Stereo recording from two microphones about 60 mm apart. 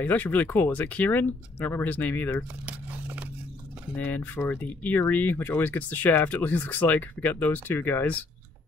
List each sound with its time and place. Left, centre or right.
0.0 s speech: left
2.6 s crumpling: right
4.0 s speech: left